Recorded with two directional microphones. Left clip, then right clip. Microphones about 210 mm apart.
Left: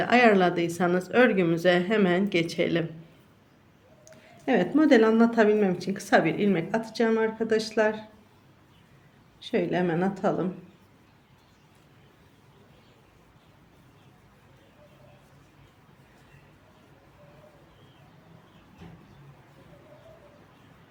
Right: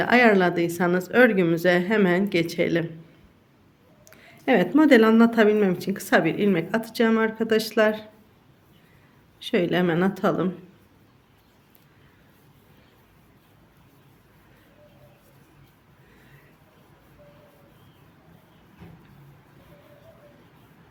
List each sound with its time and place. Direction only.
0.0 s speech: 15° right (ahead or behind)
4.0 s a woman's voice: 20° right (ahead or behind)
9.4 s a woman's voice: 25° right (ahead or behind)